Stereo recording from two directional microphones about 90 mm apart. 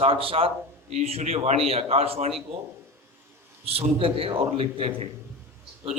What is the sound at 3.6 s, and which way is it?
A man's voice, 90° right.